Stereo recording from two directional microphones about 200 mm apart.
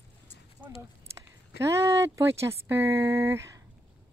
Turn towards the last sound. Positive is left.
turn(degrees=-15)  # may be behind; listen again after turning